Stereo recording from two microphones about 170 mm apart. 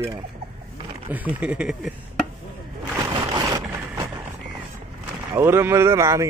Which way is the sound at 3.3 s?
20° right (ahead or behind).